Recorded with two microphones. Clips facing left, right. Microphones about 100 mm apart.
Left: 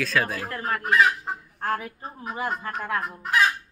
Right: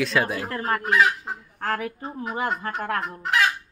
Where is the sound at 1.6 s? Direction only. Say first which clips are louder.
Right 1 dB; 90° right.